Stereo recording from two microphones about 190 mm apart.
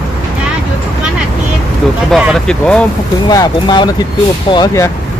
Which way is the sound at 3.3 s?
20° left (ahead or behind).